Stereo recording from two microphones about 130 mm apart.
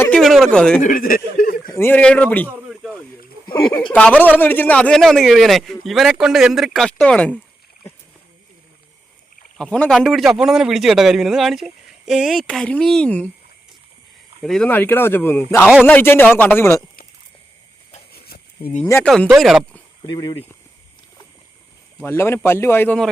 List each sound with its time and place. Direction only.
0.1 s a man's voice: centre (ahead or behind)
0.8 s speech: 85° left
1.7 s speech: 15° left (ahead or behind)
2.6 s a sound: centre (ahead or behind)
3.9 s a man's voice: 10° left (ahead or behind)
9.6 s a man's voice: 5° left (ahead or behind)
14.4 s a man's voice: 5° left (ahead or behind)
14.7 s speech: 15° left (ahead or behind)
19.0 s a man's voice: 5° left (ahead or behind)
20.1 s speech: 35° left (ahead or behind)
22.0 s speech: 20° left (ahead or behind)